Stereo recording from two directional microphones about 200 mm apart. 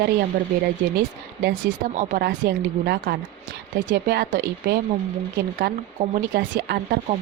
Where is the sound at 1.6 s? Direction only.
45° right (ahead or behind).